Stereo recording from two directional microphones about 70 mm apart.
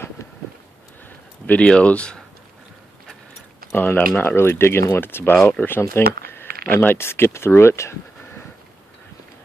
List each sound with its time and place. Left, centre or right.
0.2 s a sound: left
1.5 s speech: centre
3.7 s speech: left